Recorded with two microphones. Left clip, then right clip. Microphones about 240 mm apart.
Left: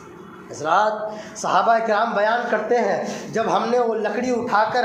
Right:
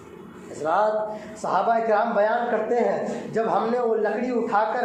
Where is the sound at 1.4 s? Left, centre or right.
Left.